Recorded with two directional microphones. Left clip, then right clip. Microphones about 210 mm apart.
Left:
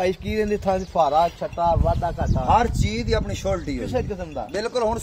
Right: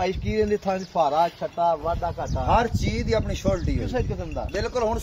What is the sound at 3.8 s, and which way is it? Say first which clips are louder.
Speech: left 2 dB; 50° left (ahead or behind).